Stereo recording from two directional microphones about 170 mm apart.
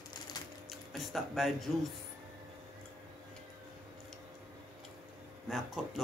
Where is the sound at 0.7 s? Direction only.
Centre (ahead or behind).